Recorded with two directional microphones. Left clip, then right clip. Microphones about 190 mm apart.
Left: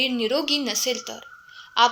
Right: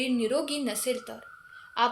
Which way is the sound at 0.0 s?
25° left (ahead or behind).